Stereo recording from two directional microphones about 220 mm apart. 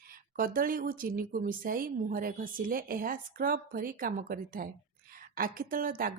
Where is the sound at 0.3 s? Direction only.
40° right (ahead or behind).